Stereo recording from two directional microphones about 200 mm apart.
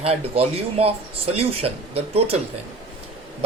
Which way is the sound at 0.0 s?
30° right (ahead or behind).